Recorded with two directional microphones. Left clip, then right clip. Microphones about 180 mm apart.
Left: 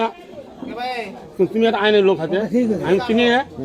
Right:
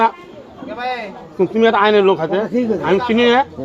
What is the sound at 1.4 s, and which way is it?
Speech, 20° left (ahead or behind).